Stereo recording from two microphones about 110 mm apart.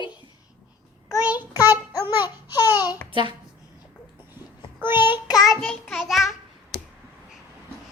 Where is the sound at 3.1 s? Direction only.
50° right (ahead or behind).